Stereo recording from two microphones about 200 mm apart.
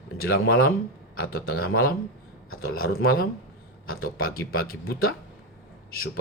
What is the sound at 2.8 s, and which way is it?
Speech, 50° left (ahead or behind).